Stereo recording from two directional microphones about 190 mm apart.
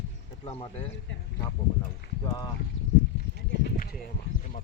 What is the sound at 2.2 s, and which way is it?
Speech, 20° left (ahead or behind).